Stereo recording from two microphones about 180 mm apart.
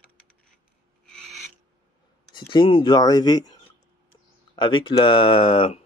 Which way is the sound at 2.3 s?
25° left (ahead or behind).